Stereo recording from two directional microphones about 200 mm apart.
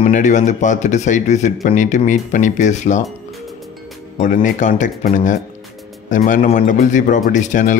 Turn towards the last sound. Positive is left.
turn(degrees=40)  # may be behind; listen again after turning